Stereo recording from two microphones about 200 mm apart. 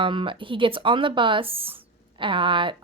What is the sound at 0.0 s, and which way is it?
Speech, 25° right (ahead or behind).